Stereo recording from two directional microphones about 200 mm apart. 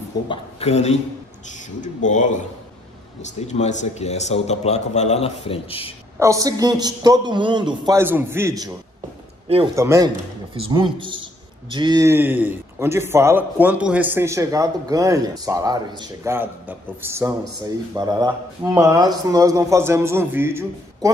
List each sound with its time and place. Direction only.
0.3 s a man's voice: 30° left (ahead or behind)
6.1 s a man's voice: 15° right (ahead or behind)
9.8 s speech: 15° right (ahead or behind)
10.5 s a man's voice: 25° right (ahead or behind)
16.3 s speech: 10° right (ahead or behind)